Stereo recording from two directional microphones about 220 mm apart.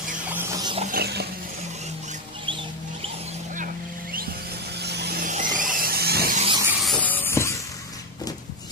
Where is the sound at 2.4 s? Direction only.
25° right (ahead or behind); by 6.4 s 45° right (ahead or behind).